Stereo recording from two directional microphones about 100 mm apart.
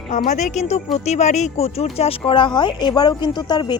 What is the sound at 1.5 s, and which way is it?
Speech, 90° left.